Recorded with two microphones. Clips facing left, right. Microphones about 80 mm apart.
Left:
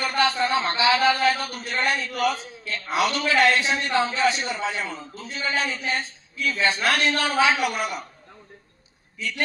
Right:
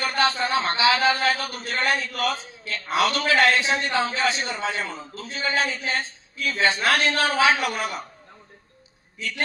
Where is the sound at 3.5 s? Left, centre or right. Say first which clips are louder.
Even; right.